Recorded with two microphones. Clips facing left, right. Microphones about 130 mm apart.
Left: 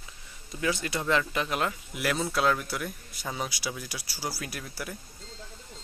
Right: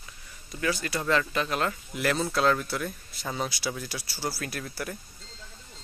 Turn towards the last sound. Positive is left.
turn(degrees=10)  # may be behind; listen again after turning